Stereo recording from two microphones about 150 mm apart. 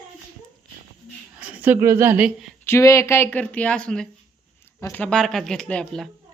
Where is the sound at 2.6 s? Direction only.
20° left (ahead or behind); by 6.1 s 5° left (ahead or behind).